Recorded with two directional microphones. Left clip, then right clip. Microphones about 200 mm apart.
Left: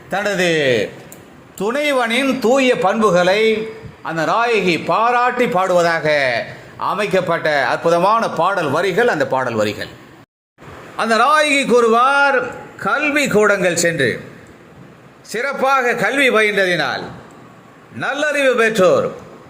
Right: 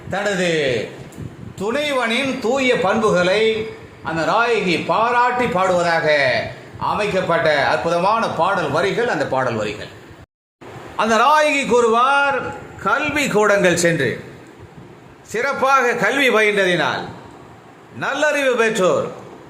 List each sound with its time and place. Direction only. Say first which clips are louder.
0.1 s a man's voice: left 2 dB; 30° left (ahead or behind)
10.9 s a man's voice: left 1 dB; 20° left (ahead or behind)
15.3 s a man's voice: even; 15° left (ahead or behind)
18.0 s a man's voice: left 1 dB; 15° left (ahead or behind)